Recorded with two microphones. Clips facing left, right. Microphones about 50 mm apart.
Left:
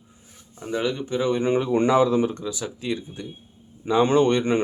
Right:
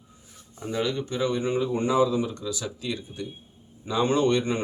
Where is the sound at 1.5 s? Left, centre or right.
Left.